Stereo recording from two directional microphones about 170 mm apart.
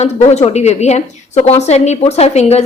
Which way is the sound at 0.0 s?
40° left (ahead or behind).